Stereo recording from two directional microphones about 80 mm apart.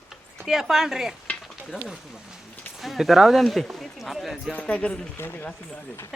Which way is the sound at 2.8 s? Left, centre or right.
Centre.